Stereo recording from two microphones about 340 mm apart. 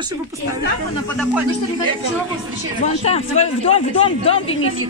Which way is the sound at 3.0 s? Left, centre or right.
Centre.